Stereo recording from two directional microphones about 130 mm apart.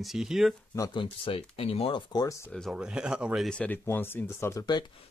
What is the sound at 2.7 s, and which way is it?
Speech, 5° right (ahead or behind).